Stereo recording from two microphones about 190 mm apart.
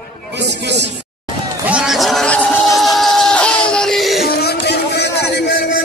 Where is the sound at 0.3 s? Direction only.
65° right (ahead or behind).